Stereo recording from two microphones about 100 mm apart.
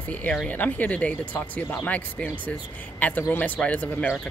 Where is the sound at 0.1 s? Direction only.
10° left (ahead or behind).